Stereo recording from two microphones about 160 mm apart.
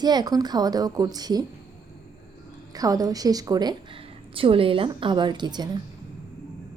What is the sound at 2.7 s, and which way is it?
A woman's voice, 20° right (ahead or behind).